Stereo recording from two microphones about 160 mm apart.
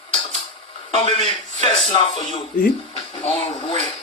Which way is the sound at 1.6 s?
30° left (ahead or behind).